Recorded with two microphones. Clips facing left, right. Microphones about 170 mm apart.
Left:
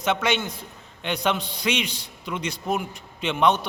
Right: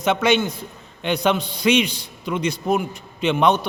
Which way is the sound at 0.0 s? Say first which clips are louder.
Right 5 dB; 15° right (ahead or behind).